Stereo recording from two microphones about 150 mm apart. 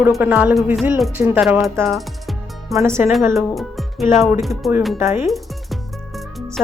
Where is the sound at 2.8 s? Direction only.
15° right (ahead or behind).